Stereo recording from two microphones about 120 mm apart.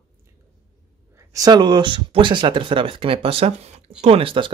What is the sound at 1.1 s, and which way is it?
Speech, 25° right (ahead or behind).